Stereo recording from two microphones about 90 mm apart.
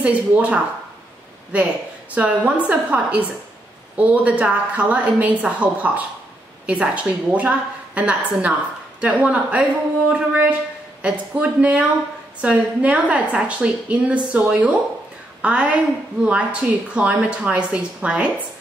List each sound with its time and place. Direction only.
0.0 s a woman's voice: 15° right (ahead or behind)